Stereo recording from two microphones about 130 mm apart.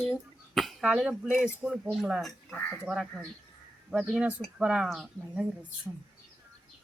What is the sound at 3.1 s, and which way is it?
Speech, centre (ahead or behind).